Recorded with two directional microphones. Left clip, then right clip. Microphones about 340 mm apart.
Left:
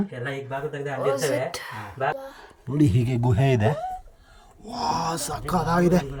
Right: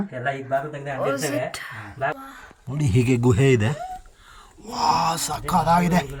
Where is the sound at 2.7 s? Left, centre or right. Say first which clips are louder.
Right 1 dB; centre.